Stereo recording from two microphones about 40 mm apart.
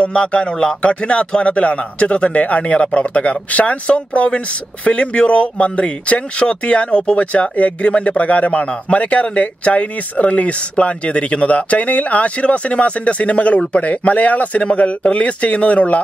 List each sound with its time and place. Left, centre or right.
0.0 s speech: left